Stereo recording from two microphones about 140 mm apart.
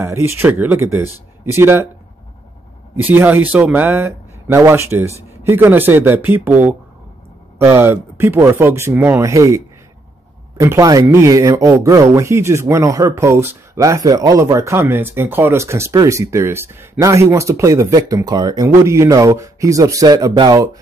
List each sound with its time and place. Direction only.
0.0 s speech: 15° right (ahead or behind)
3.1 s speech: 15° right (ahead or behind)
10.6 s speech: 25° right (ahead or behind)